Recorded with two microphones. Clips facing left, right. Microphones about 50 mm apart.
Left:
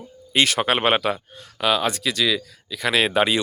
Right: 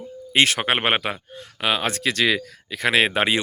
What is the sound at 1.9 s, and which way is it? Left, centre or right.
Speech, right.